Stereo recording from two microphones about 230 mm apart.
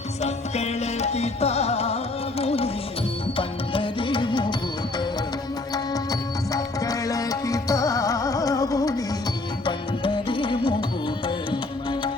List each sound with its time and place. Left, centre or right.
0.2 s music: left
5.7 s music: centre